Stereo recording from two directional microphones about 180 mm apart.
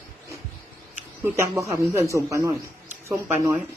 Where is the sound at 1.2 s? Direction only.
15° right (ahead or behind).